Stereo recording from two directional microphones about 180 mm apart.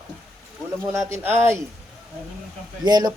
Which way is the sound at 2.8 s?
20° right (ahead or behind).